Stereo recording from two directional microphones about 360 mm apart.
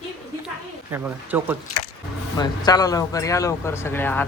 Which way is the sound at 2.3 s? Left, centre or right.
Centre.